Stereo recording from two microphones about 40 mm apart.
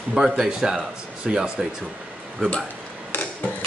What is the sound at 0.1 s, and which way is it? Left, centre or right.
A man's voice, centre.